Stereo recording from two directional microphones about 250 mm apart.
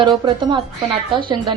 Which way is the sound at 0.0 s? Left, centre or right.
Centre.